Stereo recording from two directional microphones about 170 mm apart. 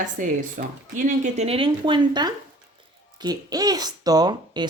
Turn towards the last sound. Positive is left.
turn(degrees=-25)  # may be behind; listen again after turning